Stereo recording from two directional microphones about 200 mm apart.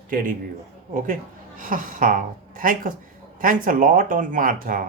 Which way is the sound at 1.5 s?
40° right (ahead or behind).